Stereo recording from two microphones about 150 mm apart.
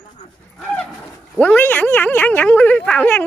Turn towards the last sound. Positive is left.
turn(degrees=10)  # may be behind; listen again after turning